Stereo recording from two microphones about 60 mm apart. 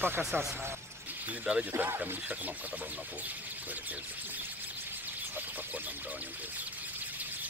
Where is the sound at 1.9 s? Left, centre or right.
Right.